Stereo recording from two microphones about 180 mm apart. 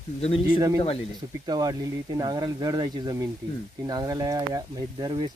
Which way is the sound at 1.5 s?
20° right (ahead or behind).